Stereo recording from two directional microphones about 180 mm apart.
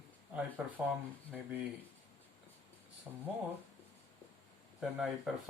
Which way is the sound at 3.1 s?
5° right (ahead or behind).